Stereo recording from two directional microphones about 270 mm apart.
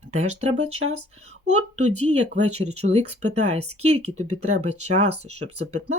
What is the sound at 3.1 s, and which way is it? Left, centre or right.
Speech, right.